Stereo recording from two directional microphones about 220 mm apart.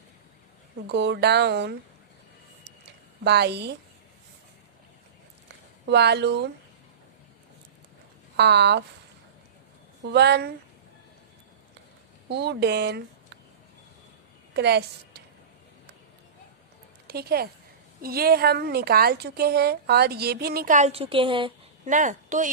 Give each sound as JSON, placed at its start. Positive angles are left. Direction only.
{"t": 0.9, "sound": "a woman's voice", "side_deg": -50}
{"t": 2.6, "sound": "a sound", "side_deg": -50}
{"t": 5.8, "sound": "a woman's voice", "side_deg": -50}
{"t": 8.4, "sound": "a woman's voice", "side_deg": -50}
{"t": 10.0, "sound": "a woman's voice", "side_deg": -50}
{"t": 12.3, "sound": "speech", "side_deg": -50}
{"t": 14.5, "sound": "a woman's voice", "side_deg": -50}
{"t": 17.1, "sound": "a woman's voice", "side_deg": -45}
{"t": 21.8, "sound": "speech", "side_deg": -35}